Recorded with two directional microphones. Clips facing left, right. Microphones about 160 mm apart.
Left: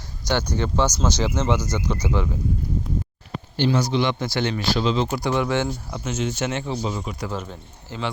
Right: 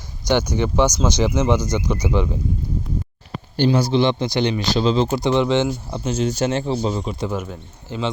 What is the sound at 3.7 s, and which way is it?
A man's voice, 30° right (ahead or behind).